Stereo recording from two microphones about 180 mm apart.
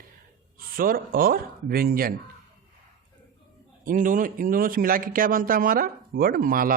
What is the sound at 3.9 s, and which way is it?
A man's voice, 45° right (ahead or behind).